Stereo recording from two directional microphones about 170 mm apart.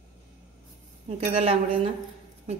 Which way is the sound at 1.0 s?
35° right (ahead or behind).